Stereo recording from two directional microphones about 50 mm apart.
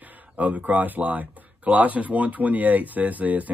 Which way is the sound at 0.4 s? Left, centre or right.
Right.